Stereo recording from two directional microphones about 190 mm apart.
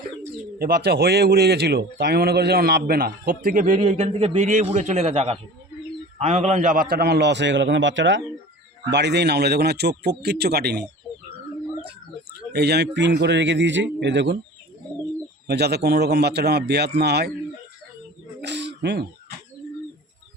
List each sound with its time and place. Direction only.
0.6 s a man's voice: 55° right (ahead or behind); by 8.2 s 75° right (ahead or behind)
8.9 s a man's voice: 65° right (ahead or behind)
12.5 s a man's voice: 60° right (ahead or behind)
15.4 s a man's voice: 60° right (ahead or behind)
18.4 s bird: 65° right (ahead or behind)